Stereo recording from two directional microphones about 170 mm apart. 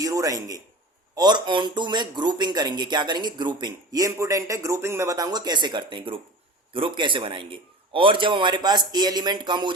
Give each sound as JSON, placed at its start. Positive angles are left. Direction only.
{"t": 0.0, "sound": "speech", "side_deg": -20}